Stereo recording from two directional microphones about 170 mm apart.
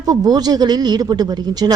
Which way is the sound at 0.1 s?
25° right (ahead or behind).